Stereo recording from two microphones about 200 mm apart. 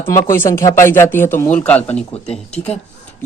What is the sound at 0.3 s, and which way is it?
Speech, 15° left (ahead or behind).